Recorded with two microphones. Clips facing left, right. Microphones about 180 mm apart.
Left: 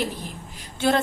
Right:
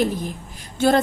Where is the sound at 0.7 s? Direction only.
45° right (ahead or behind).